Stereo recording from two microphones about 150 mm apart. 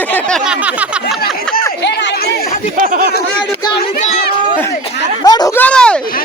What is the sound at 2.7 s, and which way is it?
Speech, 60° right (ahead or behind).